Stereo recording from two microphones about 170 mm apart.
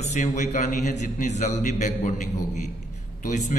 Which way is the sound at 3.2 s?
50° left (ahead or behind).